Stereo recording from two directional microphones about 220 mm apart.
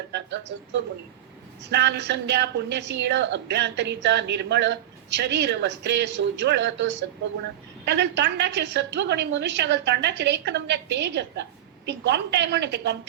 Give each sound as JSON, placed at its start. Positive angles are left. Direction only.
{"t": 0.1, "sound": "a woman's voice", "side_deg": -55}